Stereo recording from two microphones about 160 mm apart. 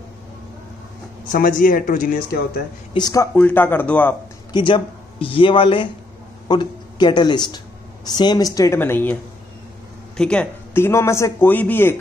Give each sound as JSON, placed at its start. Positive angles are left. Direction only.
{"t": 1.3, "sound": "speech", "side_deg": 60}
{"t": 2.9, "sound": "speech", "side_deg": 25}
{"t": 3.3, "sound": "a man's voice", "side_deg": 10}
{"t": 4.5, "sound": "a man's voice", "side_deg": 30}